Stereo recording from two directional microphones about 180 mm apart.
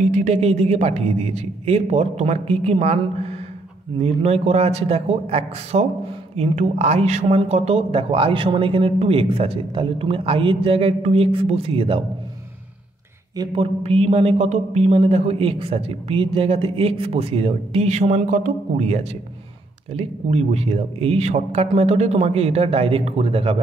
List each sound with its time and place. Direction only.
0.0 s speech: 40° right (ahead or behind)
13.4 s speech: 30° right (ahead or behind)